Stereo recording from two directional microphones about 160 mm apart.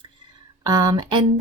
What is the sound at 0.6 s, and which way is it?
Speech, 25° right (ahead or behind).